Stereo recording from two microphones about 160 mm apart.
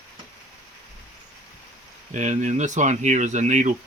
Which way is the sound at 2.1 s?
50° right (ahead or behind).